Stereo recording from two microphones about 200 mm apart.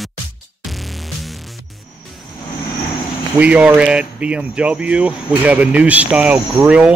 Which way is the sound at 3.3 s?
5° right (ahead or behind).